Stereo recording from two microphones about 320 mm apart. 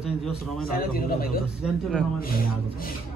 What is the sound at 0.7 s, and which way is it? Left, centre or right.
Speech, left.